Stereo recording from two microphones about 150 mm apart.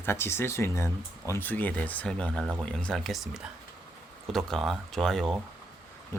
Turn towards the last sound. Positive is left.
turn(degrees=0)  # may be behind; listen again after turning